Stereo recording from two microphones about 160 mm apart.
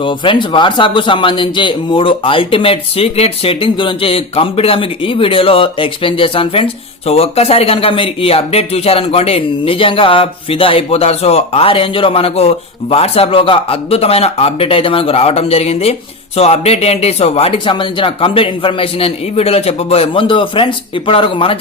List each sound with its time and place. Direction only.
0.0 s speech: 30° left (ahead or behind)